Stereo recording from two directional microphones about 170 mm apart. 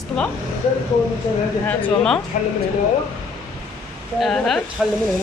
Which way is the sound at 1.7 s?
5° left (ahead or behind).